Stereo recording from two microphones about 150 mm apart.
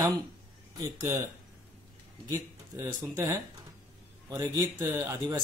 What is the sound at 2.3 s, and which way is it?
Speech, 25° right (ahead or behind).